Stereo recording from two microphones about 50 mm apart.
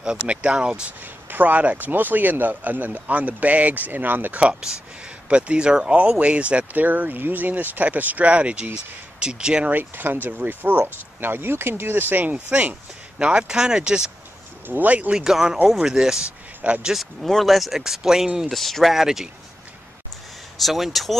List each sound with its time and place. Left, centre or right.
0.0 s speech: right
1.3 s speech: right
4.4 s speech: right
9.7 s speech: right
13.2 s speech: centre
14.7 s speech: right
15.1 s speech: centre
16.9 s speech: centre
18.5 s speech: centre
18.9 s speech: centre
20.5 s speech: centre